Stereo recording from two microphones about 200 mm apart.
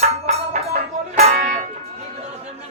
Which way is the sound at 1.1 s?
35° right (ahead or behind).